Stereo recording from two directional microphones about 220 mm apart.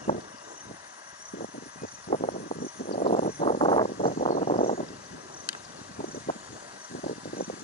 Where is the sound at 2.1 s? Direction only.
40° left (ahead or behind).